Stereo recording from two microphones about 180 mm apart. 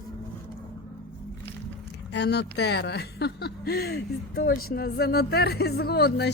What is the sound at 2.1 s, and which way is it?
Speech, 70° left (ahead or behind).